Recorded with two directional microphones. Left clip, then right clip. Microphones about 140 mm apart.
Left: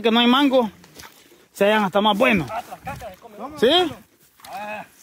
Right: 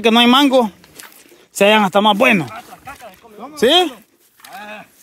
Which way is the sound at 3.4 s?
35° right (ahead or behind).